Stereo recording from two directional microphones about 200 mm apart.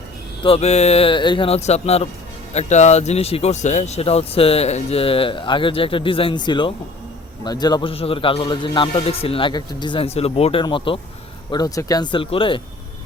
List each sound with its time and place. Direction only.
0.4 s speech: 30° left (ahead or behind)